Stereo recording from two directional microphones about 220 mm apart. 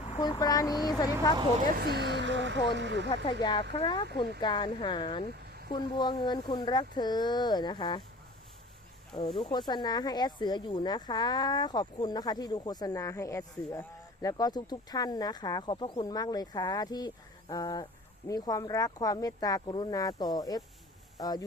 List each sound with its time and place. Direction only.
0.2 s speech: 15° left (ahead or behind)
1.6 s speech: 45° right (ahead or behind)
3.4 s speech: 20° left (ahead or behind)
9.1 s speech: 20° left (ahead or behind)